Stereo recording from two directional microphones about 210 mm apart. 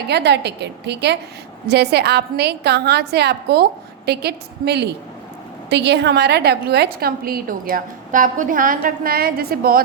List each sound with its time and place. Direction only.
0.1 s a woman's voice: 55° right (ahead or behind)